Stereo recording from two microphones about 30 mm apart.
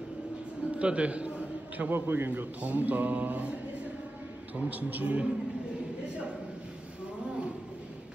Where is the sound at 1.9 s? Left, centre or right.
Right.